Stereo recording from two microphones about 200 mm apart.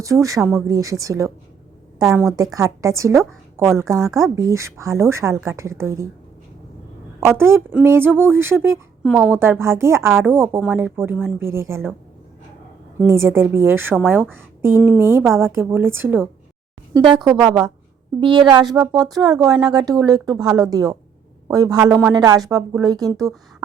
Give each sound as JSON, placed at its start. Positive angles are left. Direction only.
{"t": 0.0, "sound": "a woman's voice", "side_deg": -15}
{"t": 2.0, "sound": "a woman's voice", "side_deg": 0}
{"t": 2.3, "sound": "a woman's voice", "side_deg": -15}
{"t": 7.3, "sound": "a woman's voice", "side_deg": -10}
{"t": 13.0, "sound": "a woman's voice", "side_deg": -10}
{"t": 16.9, "sound": "a woman's voice", "side_deg": -25}